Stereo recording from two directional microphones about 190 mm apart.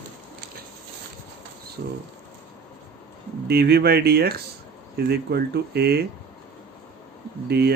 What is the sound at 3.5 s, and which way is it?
Speech, 55° right (ahead or behind).